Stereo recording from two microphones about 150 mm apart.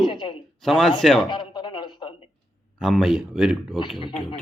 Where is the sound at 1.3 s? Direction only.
30° left (ahead or behind).